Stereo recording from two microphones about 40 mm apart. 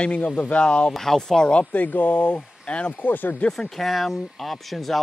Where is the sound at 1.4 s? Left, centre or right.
Left.